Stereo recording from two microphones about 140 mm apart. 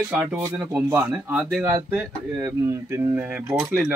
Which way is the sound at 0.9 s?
15° right (ahead or behind).